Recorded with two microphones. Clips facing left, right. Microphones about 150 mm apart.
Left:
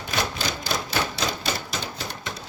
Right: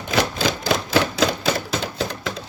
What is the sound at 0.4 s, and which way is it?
Typewriter, 90° right.